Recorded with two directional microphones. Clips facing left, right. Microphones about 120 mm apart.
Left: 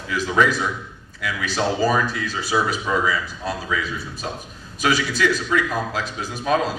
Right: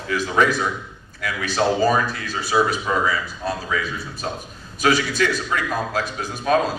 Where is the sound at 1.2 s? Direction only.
45° right (ahead or behind).